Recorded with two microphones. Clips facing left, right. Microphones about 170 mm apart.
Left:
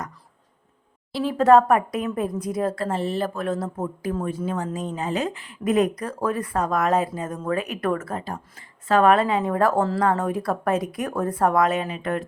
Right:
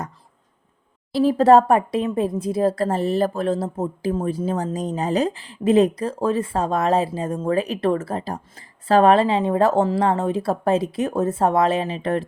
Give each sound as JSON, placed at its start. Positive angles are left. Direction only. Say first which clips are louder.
{"t": 1.1, "sound": "a woman's voice", "louder": "right 3 dB", "side_deg": -35}